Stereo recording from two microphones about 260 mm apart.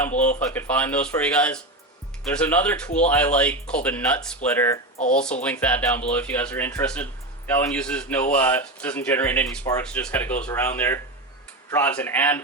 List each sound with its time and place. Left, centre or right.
0.3 s speech: centre
4.9 s speech: left
5.2 s speech: centre